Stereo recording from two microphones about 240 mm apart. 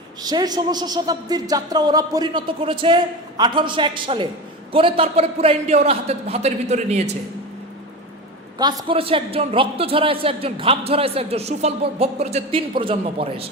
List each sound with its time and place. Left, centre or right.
0.2 s a man's voice: centre
8.5 s a man's voice: centre